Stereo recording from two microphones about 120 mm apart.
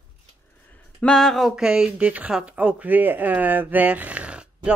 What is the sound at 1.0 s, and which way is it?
Speech, 5° left (ahead or behind).